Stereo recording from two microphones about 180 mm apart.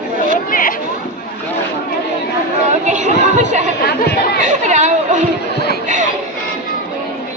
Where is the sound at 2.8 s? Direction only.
40° right (ahead or behind).